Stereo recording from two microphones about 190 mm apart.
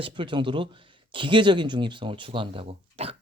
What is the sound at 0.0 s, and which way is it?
Speech, 25° right (ahead or behind).